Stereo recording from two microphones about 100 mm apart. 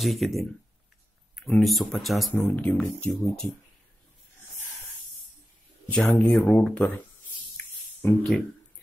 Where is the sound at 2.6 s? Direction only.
15° left (ahead or behind).